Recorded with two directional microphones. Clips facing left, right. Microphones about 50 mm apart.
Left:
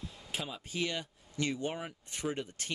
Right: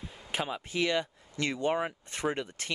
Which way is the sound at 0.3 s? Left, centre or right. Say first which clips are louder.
Right 7 dB; right.